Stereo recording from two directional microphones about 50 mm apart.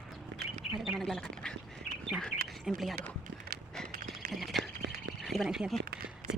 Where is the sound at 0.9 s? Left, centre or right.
Centre.